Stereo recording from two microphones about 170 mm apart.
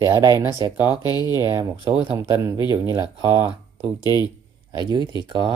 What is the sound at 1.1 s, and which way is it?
Speech, 20° left (ahead or behind).